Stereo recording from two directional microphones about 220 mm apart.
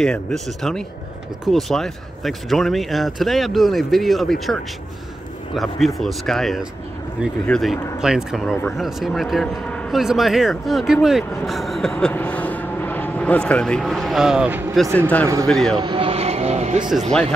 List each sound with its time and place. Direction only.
0.0 s speech: centre (ahead or behind)
15.0 s speech: 5° left (ahead or behind)
15.8 s speech: 20° right (ahead or behind)